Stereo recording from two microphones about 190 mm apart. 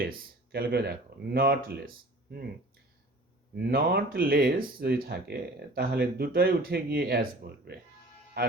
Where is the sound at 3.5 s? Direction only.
55° right (ahead or behind).